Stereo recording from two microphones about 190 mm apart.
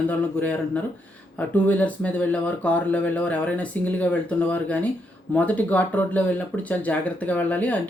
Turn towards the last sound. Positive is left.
turn(degrees=10)  # may be behind; listen again after turning